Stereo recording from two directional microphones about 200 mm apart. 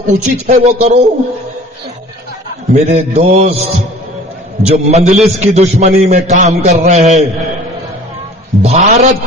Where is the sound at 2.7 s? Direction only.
35° right (ahead or behind).